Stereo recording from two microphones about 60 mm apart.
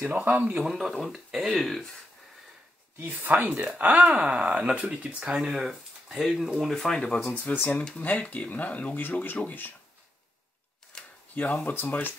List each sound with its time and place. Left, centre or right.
0.0 s speech: right
0.4 s speech: centre
0.7 s speech: centre
3.0 s speech: right; by 6.7 s centre
6.7 s speech: centre
8.0 s speech: left
10.9 s a sound: centre
11.6 s speech: left